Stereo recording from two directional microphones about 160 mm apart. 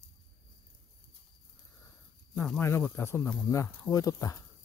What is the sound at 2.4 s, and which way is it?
Speech, 10° left (ahead or behind).